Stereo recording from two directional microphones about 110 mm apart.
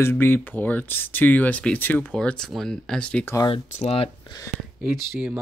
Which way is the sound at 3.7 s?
80° left.